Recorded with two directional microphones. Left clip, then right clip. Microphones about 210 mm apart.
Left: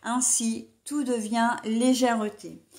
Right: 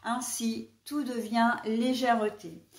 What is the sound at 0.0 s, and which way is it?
A woman's voice, 40° left (ahead or behind).